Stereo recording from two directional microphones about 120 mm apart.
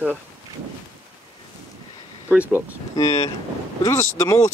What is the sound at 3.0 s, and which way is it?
Speech, 30° left (ahead or behind).